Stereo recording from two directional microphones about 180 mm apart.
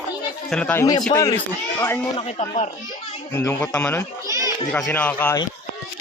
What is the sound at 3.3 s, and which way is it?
Speech, 10° left (ahead or behind).